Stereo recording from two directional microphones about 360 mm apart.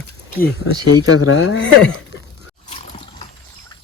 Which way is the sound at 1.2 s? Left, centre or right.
Left.